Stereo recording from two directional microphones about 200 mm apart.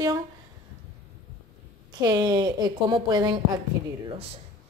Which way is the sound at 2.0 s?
20° right (ahead or behind).